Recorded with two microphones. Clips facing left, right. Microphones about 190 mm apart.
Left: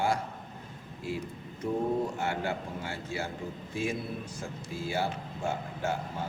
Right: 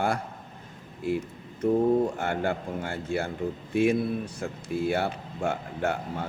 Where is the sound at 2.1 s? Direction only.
55° right (ahead or behind).